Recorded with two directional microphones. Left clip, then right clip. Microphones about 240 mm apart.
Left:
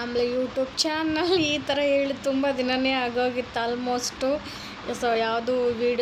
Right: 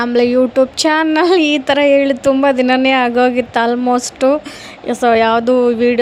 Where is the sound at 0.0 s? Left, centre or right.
Right.